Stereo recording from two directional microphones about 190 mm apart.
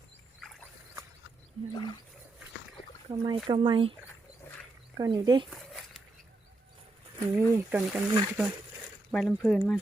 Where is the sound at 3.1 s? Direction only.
25° right (ahead or behind).